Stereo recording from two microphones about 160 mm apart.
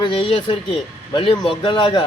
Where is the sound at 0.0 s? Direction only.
35° left (ahead or behind).